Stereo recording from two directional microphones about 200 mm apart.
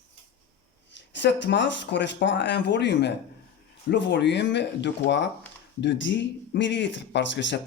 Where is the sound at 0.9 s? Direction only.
60° left (ahead or behind).